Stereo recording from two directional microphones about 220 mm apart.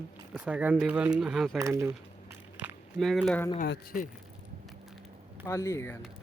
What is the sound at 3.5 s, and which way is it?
Speech, 45° left (ahead or behind).